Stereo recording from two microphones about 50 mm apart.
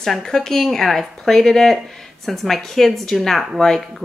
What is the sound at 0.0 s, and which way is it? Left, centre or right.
A woman's voice, centre.